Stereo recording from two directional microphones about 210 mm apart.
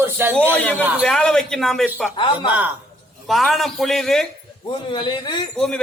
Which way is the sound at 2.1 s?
25° left (ahead or behind).